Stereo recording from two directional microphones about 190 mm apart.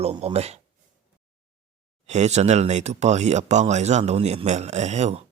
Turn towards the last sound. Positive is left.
turn(degrees=-35)  # may be behind; listen again after turning